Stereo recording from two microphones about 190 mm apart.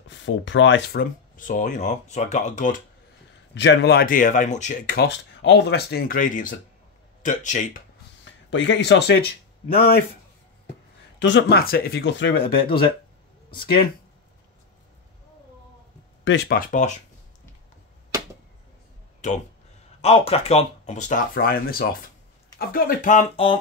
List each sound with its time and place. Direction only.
0.1 s speech: 70° left (ahead or behind)
1.3 s speech: 45° left (ahead or behind)
3.5 s speech: 65° left (ahead or behind); by 4.9 s 40° left (ahead or behind)
4.9 s speech: 65° left (ahead or behind); by 7.7 s 40° left (ahead or behind)
8.5 s speech: 70° left (ahead or behind); by 10.0 s 55° left (ahead or behind)
11.1 s speech: 65° left (ahead or behind)
16.3 s speech: 60° left (ahead or behind); by 17.0 s 40° left (ahead or behind)
19.2 s speech: 40° left (ahead or behind)